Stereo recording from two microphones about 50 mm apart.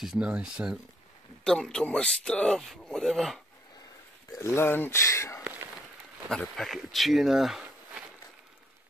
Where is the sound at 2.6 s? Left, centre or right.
Centre.